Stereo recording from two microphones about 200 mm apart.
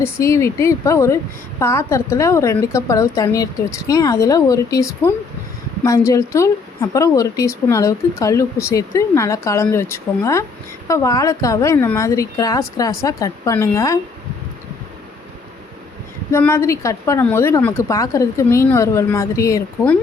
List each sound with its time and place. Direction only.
0.0 s a woman's voice: 15° left (ahead or behind)
16.3 s a woman's voice: 10° left (ahead or behind)